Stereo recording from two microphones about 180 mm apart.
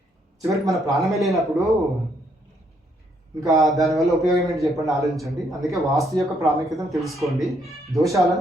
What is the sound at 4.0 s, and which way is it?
Speech, centre (ahead or behind).